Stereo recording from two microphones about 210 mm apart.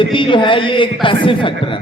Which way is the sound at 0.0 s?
25° left (ahead or behind).